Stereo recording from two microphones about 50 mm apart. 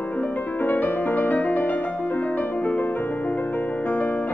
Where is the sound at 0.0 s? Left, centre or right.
Left.